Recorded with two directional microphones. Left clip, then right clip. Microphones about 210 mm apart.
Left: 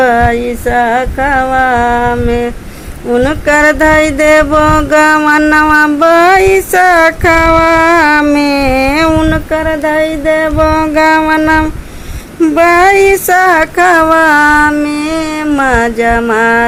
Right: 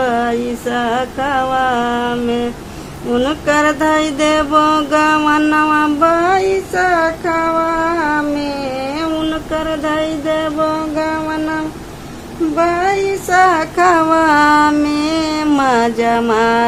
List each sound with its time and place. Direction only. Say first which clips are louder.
0.0 s female singing: left 7 dB; 20° left (ahead or behind)
3.1 s mantra: left 6 dB; 15° left (ahead or behind); by 11.6 s 30° left (ahead or behind)
12.5 s female singing: left 9 dB; 30° left (ahead or behind); by 16.6 s 10° left (ahead or behind)